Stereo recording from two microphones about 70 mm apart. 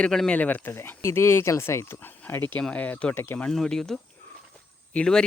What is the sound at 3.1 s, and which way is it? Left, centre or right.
Speech, left.